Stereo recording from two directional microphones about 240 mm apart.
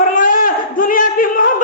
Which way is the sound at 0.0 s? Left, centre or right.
Left.